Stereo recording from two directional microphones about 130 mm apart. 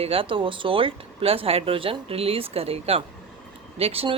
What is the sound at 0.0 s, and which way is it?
Speech, 45° right (ahead or behind).